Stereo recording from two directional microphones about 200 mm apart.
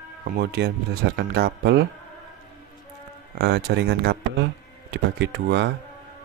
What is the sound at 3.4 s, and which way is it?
Speech, 55° right (ahead or behind).